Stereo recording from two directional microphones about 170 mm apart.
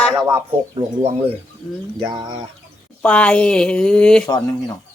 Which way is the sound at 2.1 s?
25° right (ahead or behind).